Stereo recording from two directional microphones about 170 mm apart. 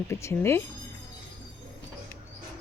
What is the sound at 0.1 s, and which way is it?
Speech, 15° left (ahead or behind).